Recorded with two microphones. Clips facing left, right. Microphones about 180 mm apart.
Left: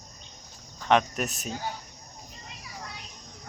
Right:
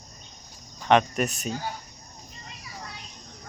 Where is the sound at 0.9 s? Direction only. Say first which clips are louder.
Right 3 dB; centre (ahead or behind).